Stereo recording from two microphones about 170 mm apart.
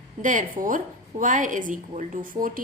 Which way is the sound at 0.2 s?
50° right (ahead or behind).